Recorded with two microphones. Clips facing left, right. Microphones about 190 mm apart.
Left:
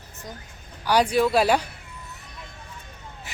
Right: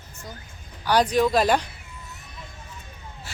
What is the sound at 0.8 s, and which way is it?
Speech, 10° left (ahead or behind).